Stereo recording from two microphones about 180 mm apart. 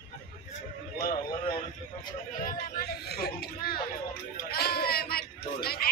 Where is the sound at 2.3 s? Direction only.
50° left (ahead or behind).